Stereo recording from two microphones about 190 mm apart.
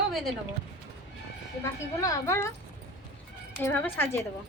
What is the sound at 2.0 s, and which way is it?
Speech, 15° left (ahead or behind).